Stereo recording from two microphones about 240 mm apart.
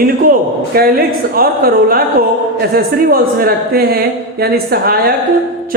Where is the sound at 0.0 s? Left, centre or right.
Right.